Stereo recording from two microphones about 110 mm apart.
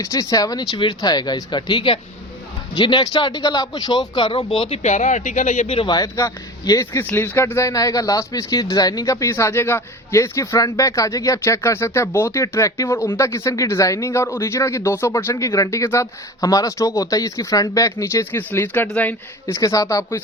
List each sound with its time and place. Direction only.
0.0 s speech: 35° left (ahead or behind); by 4.8 s 50° left (ahead or behind)
4.8 s speech: 90° left; by 5.9 s 65° left (ahead or behind)
5.9 s speech: 30° left (ahead or behind)
19.5 s speech: 30° left (ahead or behind)